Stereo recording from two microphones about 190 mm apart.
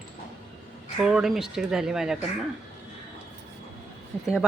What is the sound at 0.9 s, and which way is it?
Speech, 5° right (ahead or behind).